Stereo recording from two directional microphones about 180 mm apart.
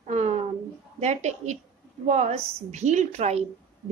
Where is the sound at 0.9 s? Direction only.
40° right (ahead or behind).